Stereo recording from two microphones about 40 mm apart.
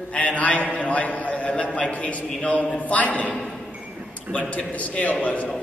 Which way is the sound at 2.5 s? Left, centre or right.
Left.